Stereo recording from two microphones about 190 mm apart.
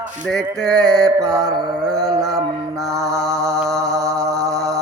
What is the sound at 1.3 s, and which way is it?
Mantra, 5° left (ahead or behind).